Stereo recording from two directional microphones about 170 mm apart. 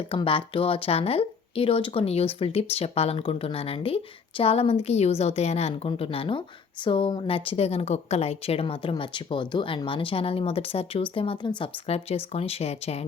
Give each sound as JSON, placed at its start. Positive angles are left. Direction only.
{"t": 0.1, "sound": "speech", "side_deg": 30}